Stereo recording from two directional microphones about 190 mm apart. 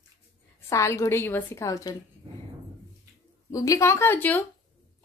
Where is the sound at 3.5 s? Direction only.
15° left (ahead or behind).